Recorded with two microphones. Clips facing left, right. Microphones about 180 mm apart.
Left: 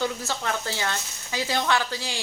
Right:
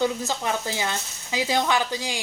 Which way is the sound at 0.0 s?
15° right (ahead or behind).